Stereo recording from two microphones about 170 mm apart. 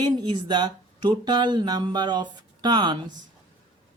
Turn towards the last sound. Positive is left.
turn(degrees=-25)  # may be behind; listen again after turning